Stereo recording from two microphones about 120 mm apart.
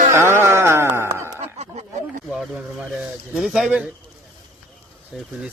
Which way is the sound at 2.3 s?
10° right (ahead or behind).